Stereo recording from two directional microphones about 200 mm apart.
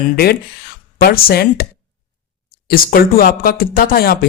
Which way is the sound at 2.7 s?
50° left (ahead or behind).